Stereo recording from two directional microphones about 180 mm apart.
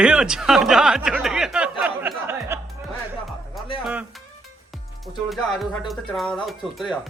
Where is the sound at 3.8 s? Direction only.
10° right (ahead or behind).